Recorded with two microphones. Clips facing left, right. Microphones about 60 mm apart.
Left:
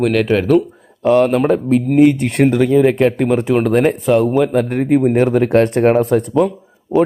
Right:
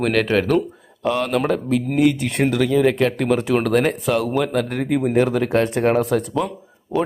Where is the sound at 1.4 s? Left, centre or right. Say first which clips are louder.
Left 6 dB; centre.